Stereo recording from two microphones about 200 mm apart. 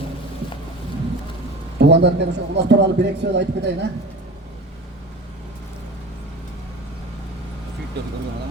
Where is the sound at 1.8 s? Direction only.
60° right (ahead or behind).